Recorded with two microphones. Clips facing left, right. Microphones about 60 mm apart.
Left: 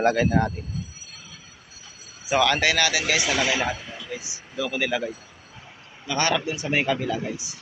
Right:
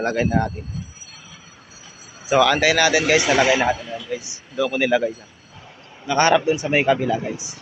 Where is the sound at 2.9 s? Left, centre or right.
Right.